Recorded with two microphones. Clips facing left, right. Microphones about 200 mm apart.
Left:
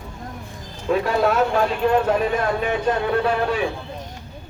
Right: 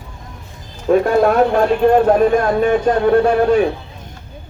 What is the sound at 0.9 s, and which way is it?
Speech, 50° right (ahead or behind).